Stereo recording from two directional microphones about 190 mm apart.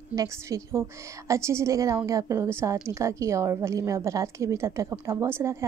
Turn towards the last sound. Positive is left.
turn(degrees=-15)  # may be behind; listen again after turning